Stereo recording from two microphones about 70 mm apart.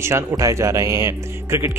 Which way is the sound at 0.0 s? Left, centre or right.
Right.